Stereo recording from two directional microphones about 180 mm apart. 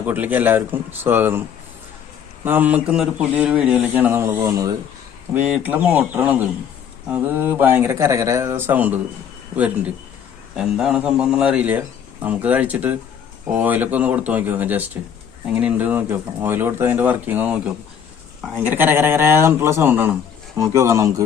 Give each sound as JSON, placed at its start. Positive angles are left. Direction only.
{"t": 0.0, "sound": "a man's voice", "side_deg": -10}
{"t": 5.3, "sound": "a man's voice", "side_deg": -10}